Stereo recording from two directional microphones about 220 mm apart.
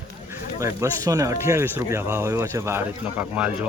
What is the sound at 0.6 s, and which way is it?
Speech, 15° right (ahead or behind).